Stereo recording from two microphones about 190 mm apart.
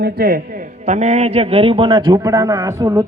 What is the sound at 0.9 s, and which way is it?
A man's voice, 35° right (ahead or behind).